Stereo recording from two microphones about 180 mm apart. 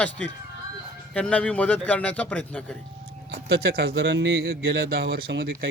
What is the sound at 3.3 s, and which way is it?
Speech, 70° right (ahead or behind).